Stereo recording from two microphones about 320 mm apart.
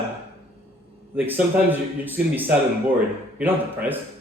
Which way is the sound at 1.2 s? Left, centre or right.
Centre.